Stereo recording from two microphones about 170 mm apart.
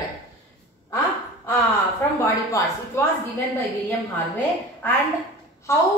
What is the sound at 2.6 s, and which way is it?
Speech, 20° left (ahead or behind).